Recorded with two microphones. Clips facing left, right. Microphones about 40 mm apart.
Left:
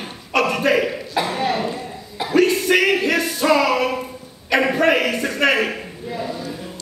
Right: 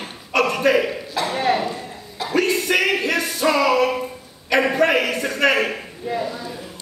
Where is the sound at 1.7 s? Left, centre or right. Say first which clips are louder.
Left 1 dB; centre.